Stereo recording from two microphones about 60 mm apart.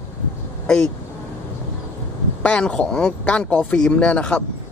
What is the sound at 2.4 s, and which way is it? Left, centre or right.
Speech, centre.